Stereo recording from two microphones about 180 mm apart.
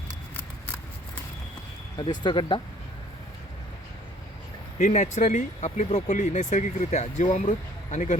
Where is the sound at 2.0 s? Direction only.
25° left (ahead or behind).